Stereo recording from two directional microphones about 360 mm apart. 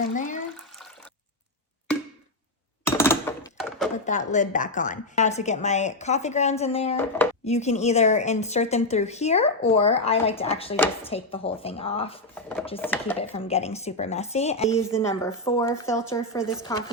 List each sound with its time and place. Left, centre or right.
0.1 s a woman's voice: left
2.8 s door: centre
3.9 s a woman's voice: left
12.3 s speech: centre
13.3 s a woman's voice: centre